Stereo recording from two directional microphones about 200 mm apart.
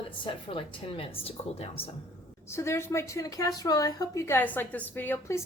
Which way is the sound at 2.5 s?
15° left (ahead or behind).